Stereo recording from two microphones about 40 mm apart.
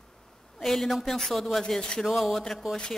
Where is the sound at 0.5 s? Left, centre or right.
Centre.